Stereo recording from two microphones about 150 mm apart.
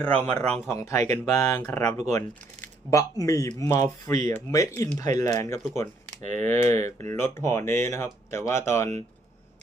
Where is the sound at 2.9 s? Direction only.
20° left (ahead or behind).